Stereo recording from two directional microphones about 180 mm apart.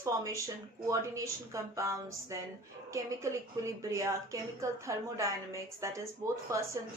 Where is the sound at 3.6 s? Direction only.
15° right (ahead or behind).